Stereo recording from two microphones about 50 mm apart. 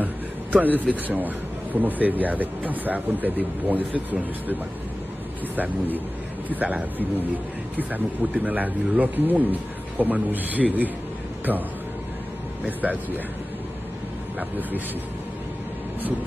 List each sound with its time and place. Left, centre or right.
0.0 s a sound: right
1.0 s speech: right
5.6 s speech: right
12.6 s speech: right